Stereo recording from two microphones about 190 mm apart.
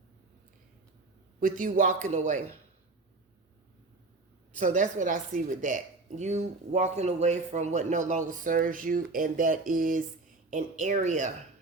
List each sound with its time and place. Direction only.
1.4 s a man's voice: 45° right (ahead or behind)
4.5 s a woman's voice: 40° right (ahead or behind)